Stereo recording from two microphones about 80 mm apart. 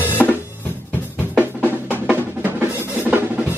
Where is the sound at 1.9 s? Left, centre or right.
Right.